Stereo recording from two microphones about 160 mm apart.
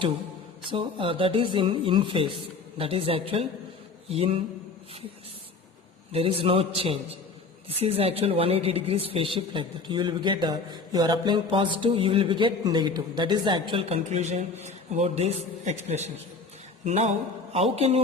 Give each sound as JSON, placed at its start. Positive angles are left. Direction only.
{"t": 0.7, "sound": "a woman's voice", "side_deg": -35}
{"t": 6.1, "sound": "a woman's voice", "side_deg": -35}